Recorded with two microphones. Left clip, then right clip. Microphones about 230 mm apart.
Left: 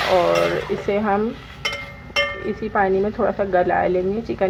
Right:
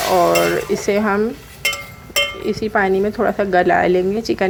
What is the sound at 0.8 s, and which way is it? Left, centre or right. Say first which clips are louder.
Speech: right 2 dB; right.